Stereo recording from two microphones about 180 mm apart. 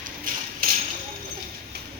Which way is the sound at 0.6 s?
50° right (ahead or behind).